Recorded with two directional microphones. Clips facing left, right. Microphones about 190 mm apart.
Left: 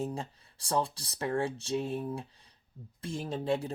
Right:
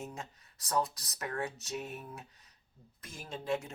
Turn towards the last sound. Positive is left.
turn(degrees=35)  # may be behind; listen again after turning